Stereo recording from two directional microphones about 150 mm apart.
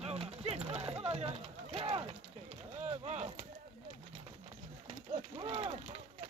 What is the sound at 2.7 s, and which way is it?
Speech, 50° right (ahead or behind).